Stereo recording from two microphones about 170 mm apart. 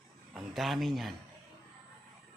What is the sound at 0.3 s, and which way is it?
Speech, centre (ahead or behind).